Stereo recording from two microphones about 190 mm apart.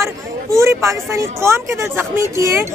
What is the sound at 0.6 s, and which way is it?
Speech, 15° right (ahead or behind).